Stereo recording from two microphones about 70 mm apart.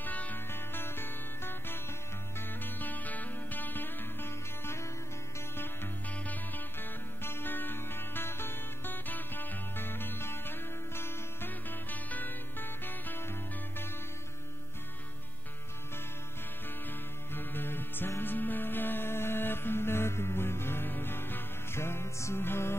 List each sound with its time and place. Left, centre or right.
0.0 s music: left
17.3 s music: left